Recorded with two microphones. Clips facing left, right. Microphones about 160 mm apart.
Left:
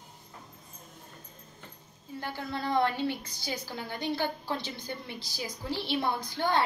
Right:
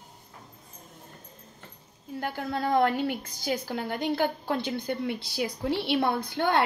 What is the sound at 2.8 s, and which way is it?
A woman's voice, 50° right (ahead or behind).